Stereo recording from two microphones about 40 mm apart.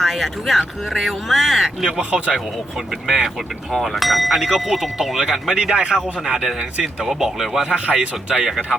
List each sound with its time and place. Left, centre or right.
0.0 s speech: centre
1.9 s speech: right
3.7 s speech: centre
5.5 s speech: centre